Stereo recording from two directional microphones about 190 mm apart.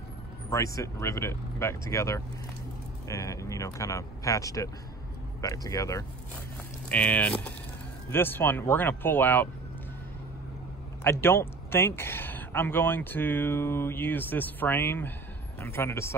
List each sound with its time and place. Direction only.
0.5 s speech: 15° left (ahead or behind)
11.1 s speech: 10° left (ahead or behind)